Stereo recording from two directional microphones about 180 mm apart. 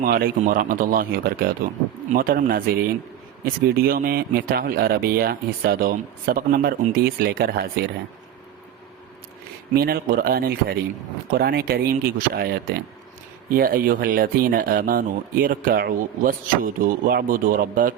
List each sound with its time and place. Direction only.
0.0 s speech: 55° right (ahead or behind)
9.7 s speech: 55° right (ahead or behind)